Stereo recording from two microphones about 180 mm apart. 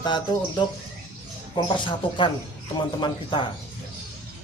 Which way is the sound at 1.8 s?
25° left (ahead or behind).